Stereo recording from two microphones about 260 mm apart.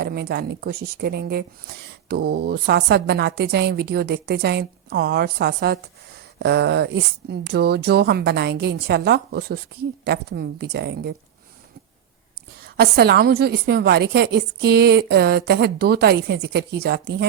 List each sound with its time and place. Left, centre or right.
0.0 s speech: right
12.5 s speech: right